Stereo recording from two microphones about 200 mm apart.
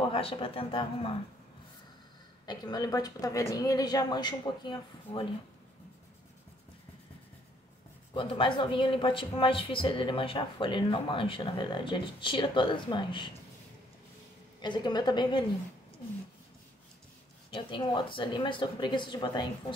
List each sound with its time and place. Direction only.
0.0 s speech: 30° left (ahead or behind)
2.4 s speech: 20° left (ahead or behind)
8.1 s speech: 25° left (ahead or behind)
14.6 s speech: 20° left (ahead or behind)
17.5 s speech: 25° left (ahead or behind)